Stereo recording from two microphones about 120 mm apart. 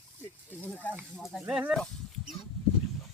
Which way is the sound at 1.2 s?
5° right (ahead or behind).